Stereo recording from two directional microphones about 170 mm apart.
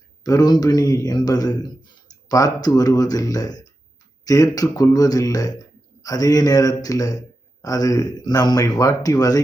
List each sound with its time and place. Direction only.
0.2 s a man's voice: 20° left (ahead or behind)